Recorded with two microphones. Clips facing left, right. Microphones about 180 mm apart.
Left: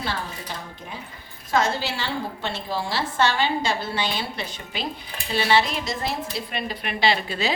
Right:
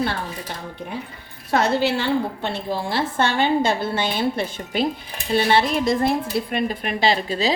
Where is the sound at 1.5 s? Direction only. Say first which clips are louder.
Right 4 dB; 60° right (ahead or behind).